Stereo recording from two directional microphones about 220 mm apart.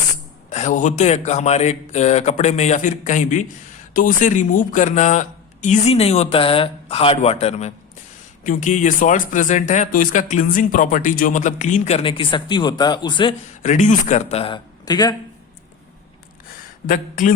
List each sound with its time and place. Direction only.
0.5 s speech: 35° left (ahead or behind)
13.6 s speech: 35° left (ahead or behind); by 15.1 s 20° left (ahead or behind)
16.8 s speech: 35° left (ahead or behind)